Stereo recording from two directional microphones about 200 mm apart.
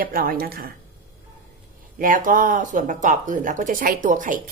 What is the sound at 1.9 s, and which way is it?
Speech, 45° right (ahead or behind).